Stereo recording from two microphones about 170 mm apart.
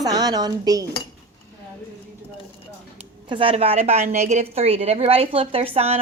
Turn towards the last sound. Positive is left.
turn(degrees=-40)  # may be behind; listen again after turning